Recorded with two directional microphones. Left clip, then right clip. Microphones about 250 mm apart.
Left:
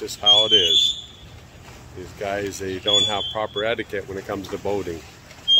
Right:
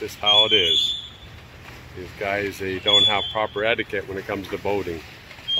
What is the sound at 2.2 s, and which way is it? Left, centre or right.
Speech, centre.